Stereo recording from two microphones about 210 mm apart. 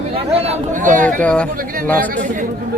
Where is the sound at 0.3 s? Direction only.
30° right (ahead or behind).